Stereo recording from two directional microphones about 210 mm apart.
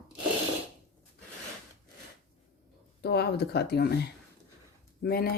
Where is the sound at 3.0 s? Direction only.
50° left (ahead or behind).